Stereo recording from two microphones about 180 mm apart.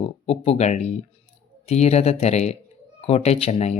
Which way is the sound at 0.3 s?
35° left (ahead or behind).